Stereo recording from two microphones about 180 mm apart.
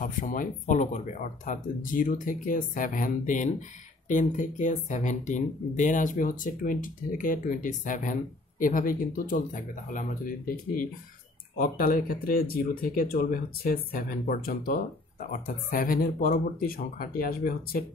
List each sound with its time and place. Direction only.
0.0 s speech: 50° left (ahead or behind)